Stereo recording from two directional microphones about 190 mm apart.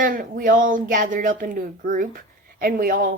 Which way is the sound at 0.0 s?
50° right (ahead or behind).